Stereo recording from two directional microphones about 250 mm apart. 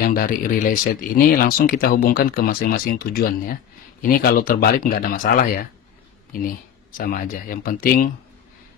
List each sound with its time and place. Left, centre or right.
0.0 s speech: left